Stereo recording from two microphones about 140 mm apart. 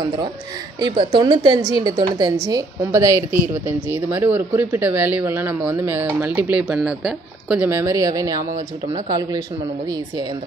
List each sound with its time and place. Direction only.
0.7 s a woman's voice: 30° right (ahead or behind); by 7.6 s centre (ahead or behind)
7.6 s speech: 20° right (ahead or behind)